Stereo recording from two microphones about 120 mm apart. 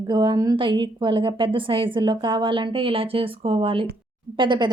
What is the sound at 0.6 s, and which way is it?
A woman's voice, 40° right (ahead or behind).